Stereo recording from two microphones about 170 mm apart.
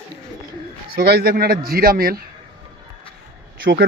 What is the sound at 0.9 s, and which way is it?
Speech, 65° right (ahead or behind).